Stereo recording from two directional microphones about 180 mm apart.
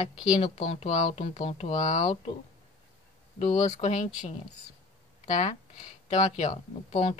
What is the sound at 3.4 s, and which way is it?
Speech, 35° left (ahead or behind).